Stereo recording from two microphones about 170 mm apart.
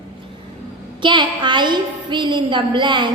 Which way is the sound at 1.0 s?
25° right (ahead or behind).